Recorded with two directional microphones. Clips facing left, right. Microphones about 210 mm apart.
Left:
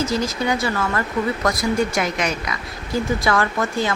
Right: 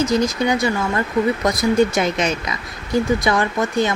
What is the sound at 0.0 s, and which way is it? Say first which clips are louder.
Speech: right 4 dB; 20° right (ahead or behind).